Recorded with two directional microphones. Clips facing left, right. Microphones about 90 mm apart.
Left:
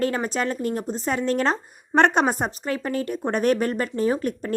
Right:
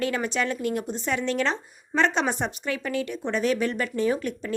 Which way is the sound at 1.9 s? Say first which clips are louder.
Left 5 dB; 60° left (ahead or behind).